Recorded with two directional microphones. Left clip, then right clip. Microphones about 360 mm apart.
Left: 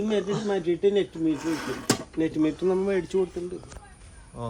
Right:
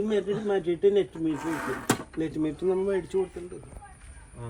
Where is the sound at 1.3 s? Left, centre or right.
Centre.